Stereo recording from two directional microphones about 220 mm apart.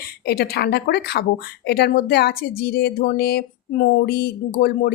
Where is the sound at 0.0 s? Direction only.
45° left (ahead or behind).